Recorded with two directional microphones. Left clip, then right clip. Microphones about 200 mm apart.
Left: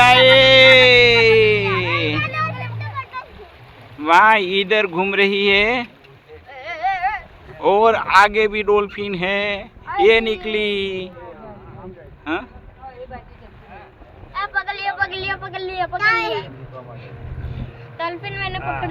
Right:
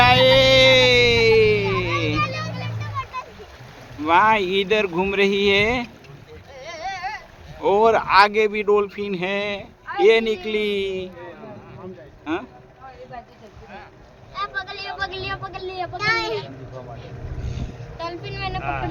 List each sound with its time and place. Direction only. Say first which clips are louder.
0.0 s a sound: left 4 dB; 5° right (ahead or behind)
2.6 s music: left 1 dB; 30° left (ahead or behind)
4.0 s speech: left 4 dB; 10° right (ahead or behind)
6.5 s a sound: left 8 dB; 20° left (ahead or behind)
7.6 s a man's voice: left 2 dB; 5° right (ahead or behind)
12.2 s speech: left 3 dB; 5° right (ahead or behind)
14.3 s a sound: left 5 dB; 20° left (ahead or behind)
16.0 s a child's voice: left 4 dB; 40° left (ahead or behind)
17.5 s vehicle: even; 25° left (ahead or behind)